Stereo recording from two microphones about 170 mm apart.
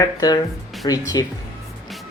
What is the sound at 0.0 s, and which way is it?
Speech, 20° left (ahead or behind).